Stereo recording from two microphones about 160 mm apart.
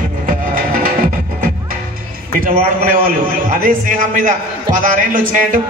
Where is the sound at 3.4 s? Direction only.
55° right (ahead or behind).